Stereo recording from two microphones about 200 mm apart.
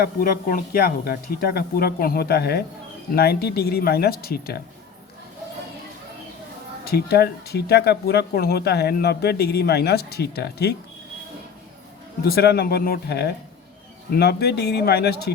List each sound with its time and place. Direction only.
0.0 s speech: 45° left (ahead or behind)
6.8 s speech: 50° left (ahead or behind)
12.2 s speech: 50° left (ahead or behind)